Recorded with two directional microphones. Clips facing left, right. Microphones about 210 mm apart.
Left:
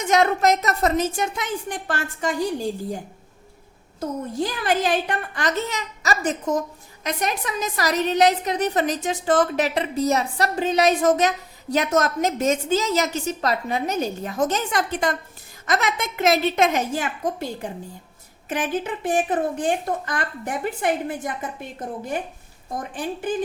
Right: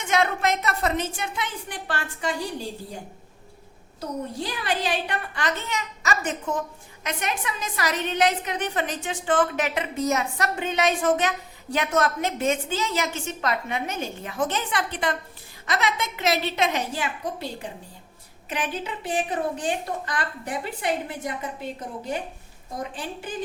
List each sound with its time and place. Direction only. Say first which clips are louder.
0.0 s a woman's voice: left 5 dB; 40° left (ahead or behind)
4.0 s a woman's voice: left 5 dB; 45° left (ahead or behind)
22.7 s a woman's voice: left 4 dB; 50° left (ahead or behind)